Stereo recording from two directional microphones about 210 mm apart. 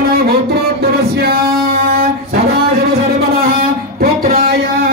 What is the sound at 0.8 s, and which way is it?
Music, 45° right (ahead or behind).